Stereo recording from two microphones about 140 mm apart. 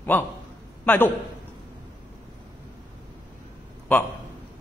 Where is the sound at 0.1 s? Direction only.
15° left (ahead or behind).